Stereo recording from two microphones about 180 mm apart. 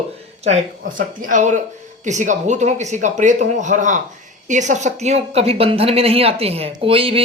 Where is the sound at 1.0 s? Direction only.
45° right (ahead or behind).